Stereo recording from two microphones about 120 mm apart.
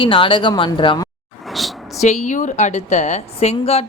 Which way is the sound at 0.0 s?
45° left (ahead or behind).